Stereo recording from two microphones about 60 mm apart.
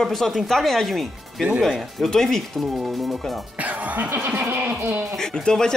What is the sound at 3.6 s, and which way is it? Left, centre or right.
Speech, right.